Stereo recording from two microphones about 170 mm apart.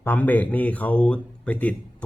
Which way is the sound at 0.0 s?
10° left (ahead or behind).